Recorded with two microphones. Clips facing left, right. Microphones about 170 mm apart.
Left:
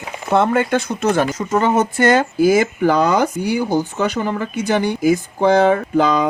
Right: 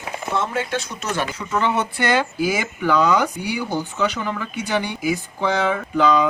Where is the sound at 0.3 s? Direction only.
55° left (ahead or behind).